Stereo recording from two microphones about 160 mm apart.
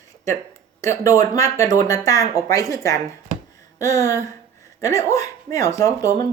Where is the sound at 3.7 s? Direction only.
20° left (ahead or behind).